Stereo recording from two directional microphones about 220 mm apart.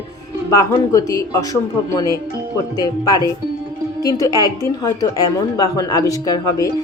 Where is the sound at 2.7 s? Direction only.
15° left (ahead or behind).